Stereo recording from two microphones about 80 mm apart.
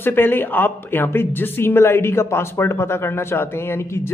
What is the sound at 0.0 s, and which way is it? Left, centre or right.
Speech, left.